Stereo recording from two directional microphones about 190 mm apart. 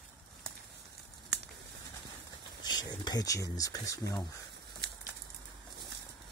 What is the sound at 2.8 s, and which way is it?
Speech, 20° left (ahead or behind).